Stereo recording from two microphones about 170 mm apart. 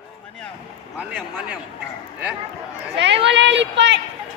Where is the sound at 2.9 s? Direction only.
90° right.